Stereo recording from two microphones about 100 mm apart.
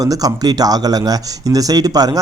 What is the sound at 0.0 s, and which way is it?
Speech, 40° right (ahead or behind).